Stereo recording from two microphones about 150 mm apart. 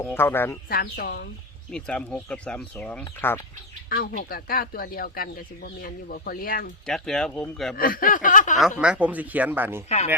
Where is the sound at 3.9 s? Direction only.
75° left (ahead or behind).